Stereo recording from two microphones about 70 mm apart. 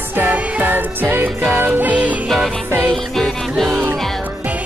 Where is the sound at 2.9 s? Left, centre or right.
Centre.